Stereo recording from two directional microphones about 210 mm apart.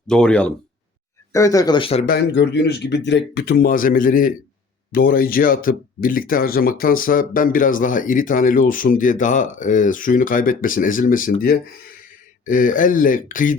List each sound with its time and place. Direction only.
0.1 s speech: 5° left (ahead or behind)
1.3 s speech: 15° left (ahead or behind)
2.0 s speech: 55° left (ahead or behind)